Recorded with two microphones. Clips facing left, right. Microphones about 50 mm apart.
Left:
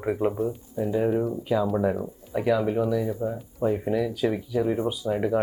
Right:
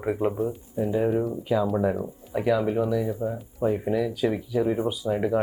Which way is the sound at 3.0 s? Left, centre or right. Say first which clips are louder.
Even; centre.